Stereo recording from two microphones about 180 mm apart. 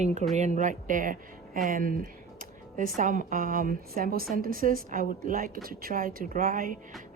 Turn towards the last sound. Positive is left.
turn(degrees=-50)  # may be behind; listen again after turning